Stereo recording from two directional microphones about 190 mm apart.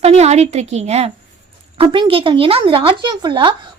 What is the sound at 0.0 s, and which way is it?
A woman's voice, 35° right (ahead or behind).